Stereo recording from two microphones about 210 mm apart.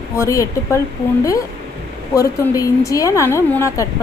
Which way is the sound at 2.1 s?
15° left (ahead or behind).